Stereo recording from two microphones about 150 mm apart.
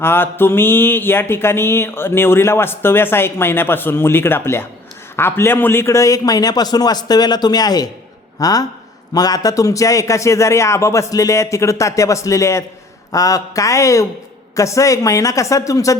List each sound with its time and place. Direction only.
0.0 s mantra: 15° left (ahead or behind)
5.1 s a man's voice: 15° left (ahead or behind)